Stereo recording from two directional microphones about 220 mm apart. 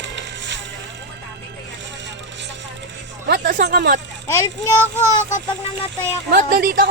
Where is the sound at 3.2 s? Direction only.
50° right (ahead or behind).